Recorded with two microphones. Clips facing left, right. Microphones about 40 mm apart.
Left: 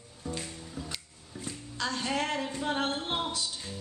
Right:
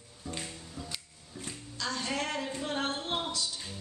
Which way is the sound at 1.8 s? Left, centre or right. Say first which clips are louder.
Left 3 dB; centre.